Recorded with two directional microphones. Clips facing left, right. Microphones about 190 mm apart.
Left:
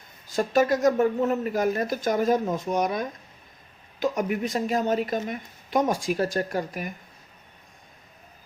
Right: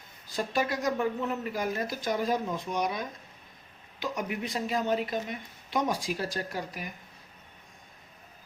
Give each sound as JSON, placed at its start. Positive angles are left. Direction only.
{"t": 0.3, "sound": "a woman's voice", "side_deg": 45}